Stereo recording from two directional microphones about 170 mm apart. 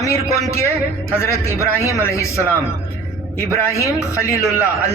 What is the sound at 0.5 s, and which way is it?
A man's voice, 15° left (ahead or behind).